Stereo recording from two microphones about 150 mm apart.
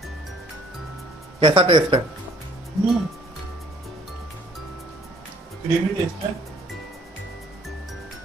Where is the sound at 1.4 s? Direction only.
35° right (ahead or behind).